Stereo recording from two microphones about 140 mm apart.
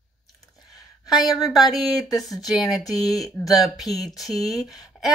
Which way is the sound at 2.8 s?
25° left (ahead or behind).